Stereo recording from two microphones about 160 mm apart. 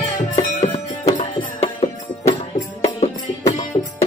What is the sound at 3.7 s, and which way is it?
Music, 35° left (ahead or behind).